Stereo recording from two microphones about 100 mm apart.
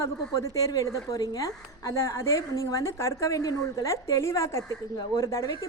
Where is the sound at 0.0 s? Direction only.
35° left (ahead or behind).